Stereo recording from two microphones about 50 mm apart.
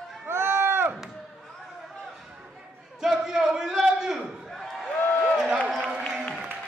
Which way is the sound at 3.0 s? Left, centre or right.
Centre.